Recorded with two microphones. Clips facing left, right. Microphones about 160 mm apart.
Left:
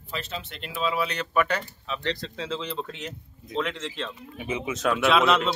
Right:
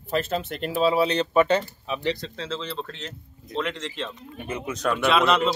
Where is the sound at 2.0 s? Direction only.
5° right (ahead or behind).